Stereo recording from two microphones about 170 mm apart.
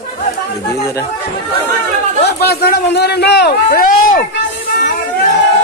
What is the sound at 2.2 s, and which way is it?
A man's voice, 70° left (ahead or behind).